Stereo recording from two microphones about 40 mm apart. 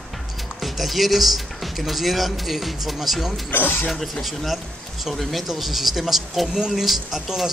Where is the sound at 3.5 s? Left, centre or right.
Left.